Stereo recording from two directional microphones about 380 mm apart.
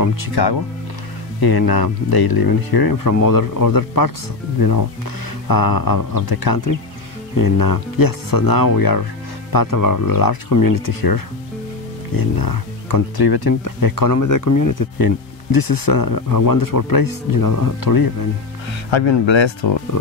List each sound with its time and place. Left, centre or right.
0.0 s speech: left
1.4 s speech: left
19.6 s speech: left